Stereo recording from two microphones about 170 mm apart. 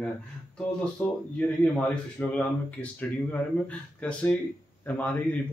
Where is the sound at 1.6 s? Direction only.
5° left (ahead or behind).